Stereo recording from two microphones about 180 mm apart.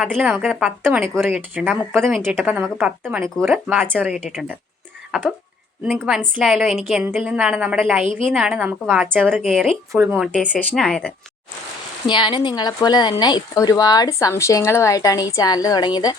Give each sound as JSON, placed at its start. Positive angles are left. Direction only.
{"t": 0.0, "sound": "a woman's voice", "side_deg": -5}
{"t": 9.9, "sound": "a woman's voice", "side_deg": -10}
{"t": 10.3, "sound": "speech", "side_deg": 10}
{"t": 12.0, "sound": "speech", "side_deg": 25}